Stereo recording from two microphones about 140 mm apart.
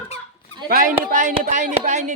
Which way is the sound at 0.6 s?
90° right.